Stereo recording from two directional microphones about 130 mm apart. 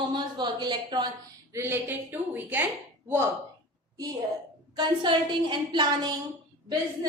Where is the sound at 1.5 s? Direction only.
20° right (ahead or behind).